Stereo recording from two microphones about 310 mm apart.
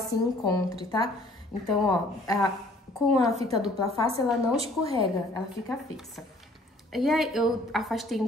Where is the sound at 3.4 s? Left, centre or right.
Centre.